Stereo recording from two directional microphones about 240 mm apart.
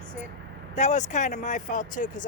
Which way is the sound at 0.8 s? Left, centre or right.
Left.